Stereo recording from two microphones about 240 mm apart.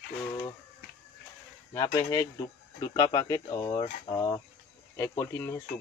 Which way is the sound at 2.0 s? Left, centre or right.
Centre.